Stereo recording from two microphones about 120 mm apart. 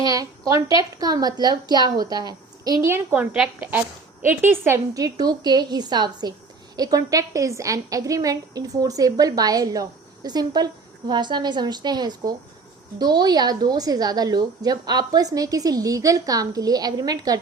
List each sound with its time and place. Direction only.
0.0 s a woman's voice: 30° right (ahead or behind)
2.8 s a woman's voice: 20° right (ahead or behind)